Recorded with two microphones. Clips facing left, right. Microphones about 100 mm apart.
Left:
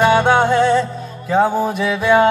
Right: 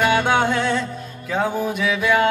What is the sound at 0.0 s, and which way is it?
Music, 30° left (ahead or behind).